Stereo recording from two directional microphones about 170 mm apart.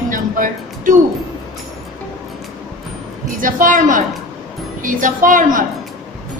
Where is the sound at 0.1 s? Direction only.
55° right (ahead or behind).